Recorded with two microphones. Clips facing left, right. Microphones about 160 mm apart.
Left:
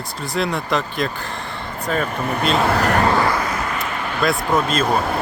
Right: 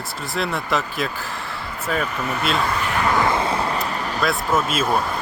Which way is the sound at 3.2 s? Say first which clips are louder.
Even; 25° right (ahead or behind).